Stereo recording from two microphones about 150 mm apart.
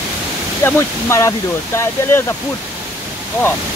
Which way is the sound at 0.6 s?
20° left (ahead or behind).